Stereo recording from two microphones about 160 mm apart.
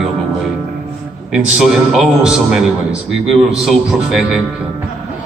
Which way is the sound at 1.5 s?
5° right (ahead or behind).